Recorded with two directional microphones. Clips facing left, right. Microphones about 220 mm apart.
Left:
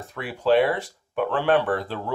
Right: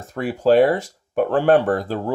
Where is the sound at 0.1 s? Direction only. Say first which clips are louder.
Right 5 dB; 45° right (ahead or behind).